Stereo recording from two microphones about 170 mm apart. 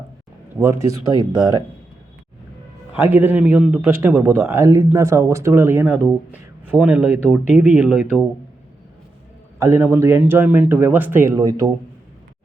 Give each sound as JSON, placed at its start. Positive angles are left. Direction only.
{"t": 0.6, "sound": "speech", "side_deg": -15}
{"t": 2.9, "sound": "speech", "side_deg": -10}
{"t": 9.6, "sound": "speech", "side_deg": -15}